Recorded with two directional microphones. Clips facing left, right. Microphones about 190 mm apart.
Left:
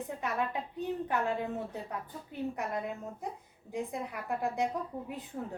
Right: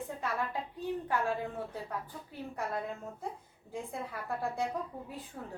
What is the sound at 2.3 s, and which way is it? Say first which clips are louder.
A woman's voice: left 3 dB; 20° left (ahead or behind).